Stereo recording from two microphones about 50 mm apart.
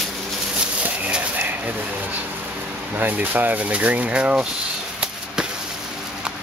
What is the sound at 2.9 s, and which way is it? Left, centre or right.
Speech, right.